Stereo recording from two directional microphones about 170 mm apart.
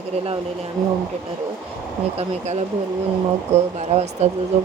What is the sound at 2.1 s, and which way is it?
Speech, 40° right (ahead or behind).